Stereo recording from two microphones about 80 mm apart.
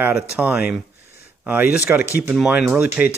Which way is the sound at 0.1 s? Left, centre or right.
Right.